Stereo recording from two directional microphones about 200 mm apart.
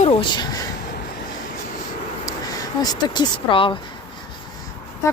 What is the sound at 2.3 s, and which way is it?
Speech, 20° left (ahead or behind).